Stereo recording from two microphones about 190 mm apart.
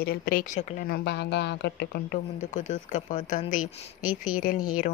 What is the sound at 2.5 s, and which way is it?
Speech, 40° left (ahead or behind).